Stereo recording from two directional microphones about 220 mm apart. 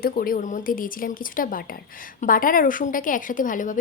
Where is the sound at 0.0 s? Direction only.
40° left (ahead or behind).